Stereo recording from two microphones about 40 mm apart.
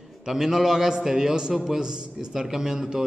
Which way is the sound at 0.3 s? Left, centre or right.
Centre.